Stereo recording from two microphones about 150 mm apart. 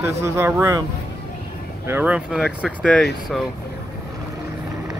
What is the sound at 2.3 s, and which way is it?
Speech, 5° left (ahead or behind).